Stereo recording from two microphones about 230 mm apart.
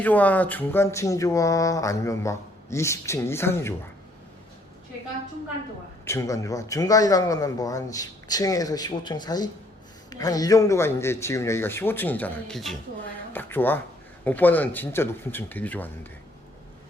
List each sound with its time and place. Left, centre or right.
0.0 s speech: centre
6.1 s speech: centre